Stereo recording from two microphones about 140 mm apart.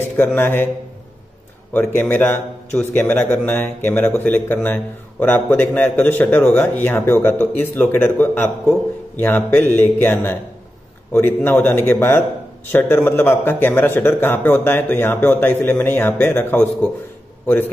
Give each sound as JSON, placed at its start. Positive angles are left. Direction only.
{"t": 0.3, "sound": "a man's voice", "side_deg": 15}
{"t": 1.7, "sound": "a man's voice", "side_deg": 10}